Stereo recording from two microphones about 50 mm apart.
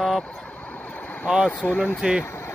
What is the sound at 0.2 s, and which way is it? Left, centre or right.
Vehicle, left.